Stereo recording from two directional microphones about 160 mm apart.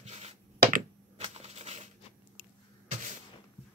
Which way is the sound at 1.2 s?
40° right (ahead or behind).